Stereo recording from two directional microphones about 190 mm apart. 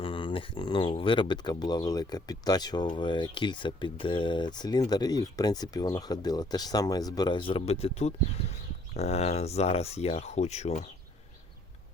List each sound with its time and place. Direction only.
0.0 s speech: 25° left (ahead or behind)